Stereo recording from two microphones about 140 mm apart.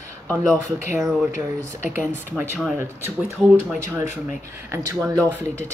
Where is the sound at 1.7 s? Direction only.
15° right (ahead or behind).